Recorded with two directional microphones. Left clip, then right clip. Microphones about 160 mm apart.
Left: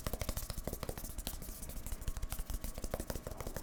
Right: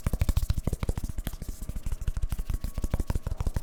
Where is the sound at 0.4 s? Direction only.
55° right (ahead or behind).